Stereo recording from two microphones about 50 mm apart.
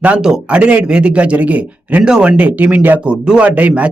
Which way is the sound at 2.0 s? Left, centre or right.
Centre.